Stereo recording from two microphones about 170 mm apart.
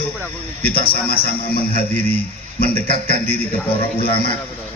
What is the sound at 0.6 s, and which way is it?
A man's voice, 65° left (ahead or behind).